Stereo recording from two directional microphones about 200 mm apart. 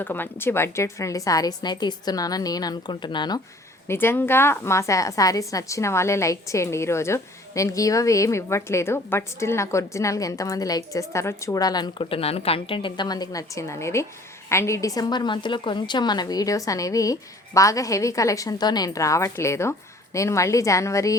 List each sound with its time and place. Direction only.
0.0 s a woman's voice: 10° left (ahead or behind)